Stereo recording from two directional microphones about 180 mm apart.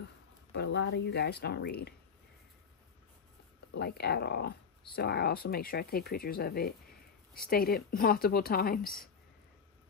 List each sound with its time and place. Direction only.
0.5 s speech: 70° left (ahead or behind)
3.7 s speech: 65° left (ahead or behind)